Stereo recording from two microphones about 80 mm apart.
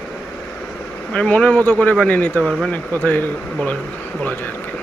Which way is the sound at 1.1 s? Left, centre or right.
Centre.